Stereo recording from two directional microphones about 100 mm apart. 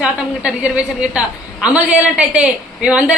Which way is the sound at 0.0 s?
10° right (ahead or behind).